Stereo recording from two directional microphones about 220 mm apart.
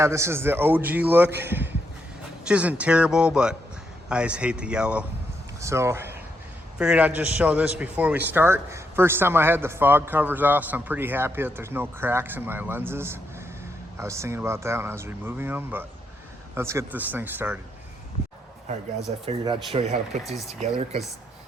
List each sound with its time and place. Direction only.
0.0 s a man's voice: 10° right (ahead or behind)
2.5 s a man's voice: 5° right (ahead or behind)
19.7 s speech: 30° right (ahead or behind)
20.2 s speech: centre (ahead or behind)
20.6 s speech: 30° right (ahead or behind)